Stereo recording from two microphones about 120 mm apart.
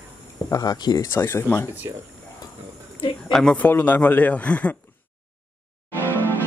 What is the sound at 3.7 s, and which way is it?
A man's voice, 15° left (ahead or behind).